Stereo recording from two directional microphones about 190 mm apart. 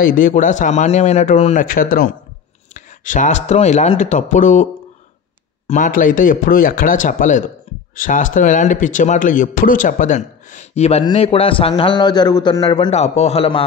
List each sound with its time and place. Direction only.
0.0 s speech: 45° left (ahead or behind)
5.7 s speech: 45° left (ahead or behind)